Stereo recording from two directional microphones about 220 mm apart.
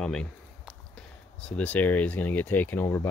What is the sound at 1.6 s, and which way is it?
Speech, 5° left (ahead or behind).